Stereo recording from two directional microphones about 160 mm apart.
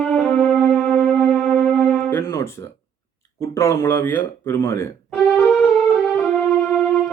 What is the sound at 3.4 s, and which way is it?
Speech, 15° left (ahead or behind).